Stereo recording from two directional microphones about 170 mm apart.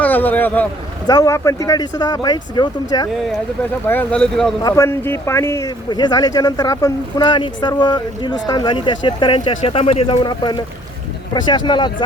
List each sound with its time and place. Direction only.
0.0 s speech: 10° left (ahead or behind)
1.0 s speech: 20° left (ahead or behind)
3.8 s speech: 10° left (ahead or behind)
4.6 s speech: 15° left (ahead or behind)